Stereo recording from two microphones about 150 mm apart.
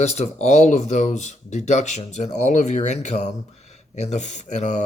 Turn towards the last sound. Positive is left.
turn(degrees=55)  # may be behind; listen again after turning